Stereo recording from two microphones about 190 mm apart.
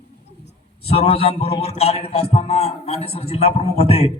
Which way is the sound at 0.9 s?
30° left (ahead or behind).